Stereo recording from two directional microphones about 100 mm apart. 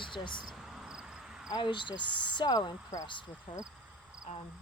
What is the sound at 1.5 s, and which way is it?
Speech, 55° left (ahead or behind).